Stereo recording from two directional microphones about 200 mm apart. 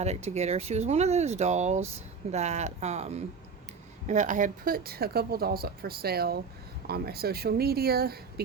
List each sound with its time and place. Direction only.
0.0 s speech: 35° right (ahead or behind); by 8.2 s 50° right (ahead or behind)